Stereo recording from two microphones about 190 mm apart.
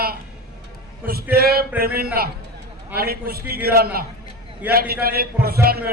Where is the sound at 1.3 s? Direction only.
55° right (ahead or behind).